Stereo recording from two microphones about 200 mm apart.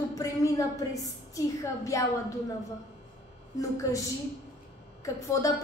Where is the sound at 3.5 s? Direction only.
15° left (ahead or behind).